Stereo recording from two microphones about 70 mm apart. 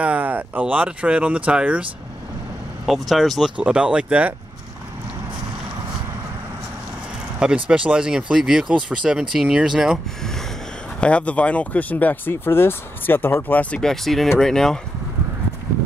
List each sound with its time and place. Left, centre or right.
0.0 s speech: right
2.9 s speech: centre
3.5 s speech: centre
7.3 s speech: centre
11.0 s speech: centre
13.7 s speech: centre